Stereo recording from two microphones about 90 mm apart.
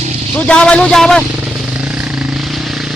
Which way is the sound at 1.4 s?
10° right (ahead or behind).